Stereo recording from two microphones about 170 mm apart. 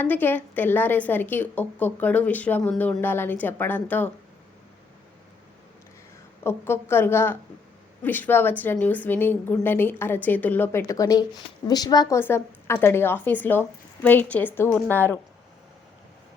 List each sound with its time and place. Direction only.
0.0 s speech: 10° left (ahead or behind)
6.4 s a woman's voice: 15° left (ahead or behind)